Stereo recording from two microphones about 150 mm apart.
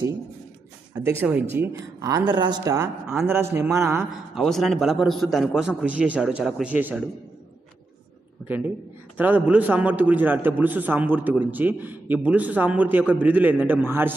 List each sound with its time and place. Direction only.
1.2 s a man's voice: 15° right (ahead or behind)
4.4 s a man's voice: centre (ahead or behind)
8.5 s a man's voice: 10° right (ahead or behind)